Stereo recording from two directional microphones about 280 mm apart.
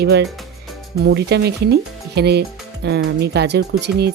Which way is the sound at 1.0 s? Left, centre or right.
Right.